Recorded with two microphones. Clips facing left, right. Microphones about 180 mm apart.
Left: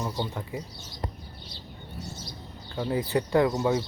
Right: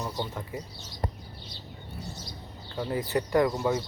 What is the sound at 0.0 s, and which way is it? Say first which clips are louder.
Speech: left 2 dB; 10° left (ahead or behind).